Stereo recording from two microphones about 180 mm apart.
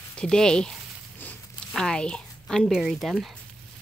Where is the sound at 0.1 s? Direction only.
5° left (ahead or behind).